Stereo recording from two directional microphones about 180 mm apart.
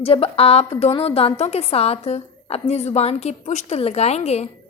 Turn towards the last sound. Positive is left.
turn(degrees=35)  # may be behind; listen again after turning